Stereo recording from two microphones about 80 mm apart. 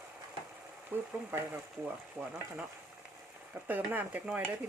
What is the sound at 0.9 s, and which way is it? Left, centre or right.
Speech, right.